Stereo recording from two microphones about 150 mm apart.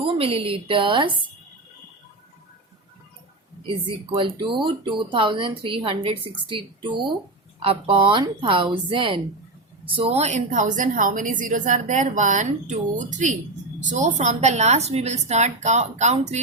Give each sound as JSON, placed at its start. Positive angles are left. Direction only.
{"t": 0.0, "sound": "a woman's voice", "side_deg": -40}
{"t": 3.8, "sound": "a woman's voice", "side_deg": -35}